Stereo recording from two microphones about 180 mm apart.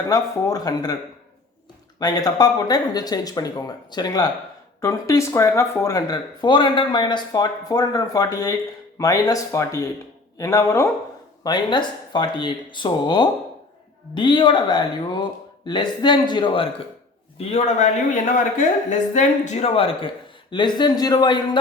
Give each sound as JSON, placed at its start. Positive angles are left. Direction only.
{"t": 0.1, "sound": "speech", "side_deg": 20}
{"t": 2.0, "sound": "speech", "side_deg": 20}
{"t": 17.3, "sound": "speech", "side_deg": 40}